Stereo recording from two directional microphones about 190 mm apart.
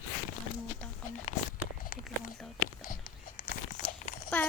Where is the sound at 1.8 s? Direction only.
50° left (ahead or behind).